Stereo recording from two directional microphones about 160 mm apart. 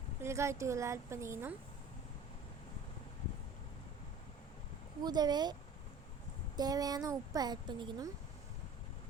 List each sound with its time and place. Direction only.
0.2 s a woman's voice: 15° right (ahead or behind)
5.0 s speech: 25° right (ahead or behind)
6.6 s speech: 25° right (ahead or behind)